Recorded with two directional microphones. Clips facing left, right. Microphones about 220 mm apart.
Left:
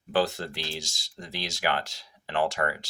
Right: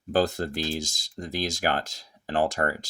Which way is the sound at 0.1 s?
45° right (ahead or behind).